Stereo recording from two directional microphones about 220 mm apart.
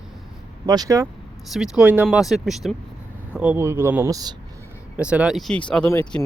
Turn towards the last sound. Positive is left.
turn(degrees=5)  # may be behind; listen again after turning